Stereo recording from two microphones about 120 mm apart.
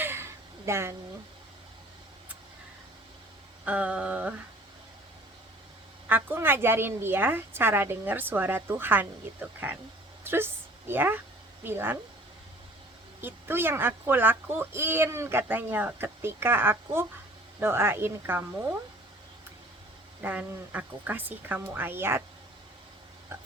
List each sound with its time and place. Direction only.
0.0 s a sound: 20° right (ahead or behind)
3.7 s a woman's voice: 10° right (ahead or behind)
6.1 s a woman's voice: 15° right (ahead or behind)
13.2 s speech: 20° right (ahead or behind)
20.2 s a woman's voice: 15° right (ahead or behind)